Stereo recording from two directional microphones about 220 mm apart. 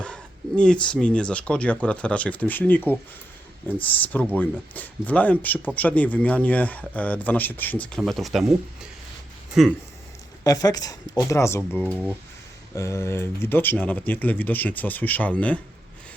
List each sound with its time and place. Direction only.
0.0 s speech: 5° left (ahead or behind)
10.4 s speech: 15° left (ahead or behind)